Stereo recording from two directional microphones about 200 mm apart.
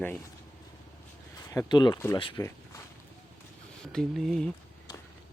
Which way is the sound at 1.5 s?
20° left (ahead or behind).